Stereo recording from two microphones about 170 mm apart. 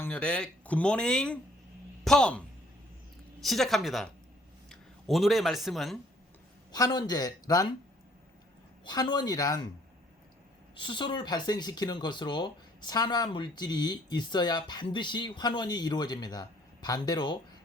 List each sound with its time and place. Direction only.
0.0 s speech: 5° left (ahead or behind)
3.4 s speech: centre (ahead or behind)
6.7 s speech: 20° left (ahead or behind)
8.8 s speech: 25° left (ahead or behind)
10.8 s speech: 30° left (ahead or behind)